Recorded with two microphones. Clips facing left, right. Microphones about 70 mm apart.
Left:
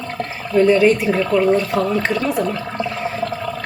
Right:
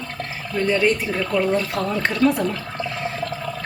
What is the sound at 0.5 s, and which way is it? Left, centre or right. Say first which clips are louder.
A woman's voice: left 7 dB; centre.